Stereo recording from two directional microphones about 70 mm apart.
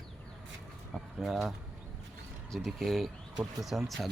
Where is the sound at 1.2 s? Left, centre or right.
Centre.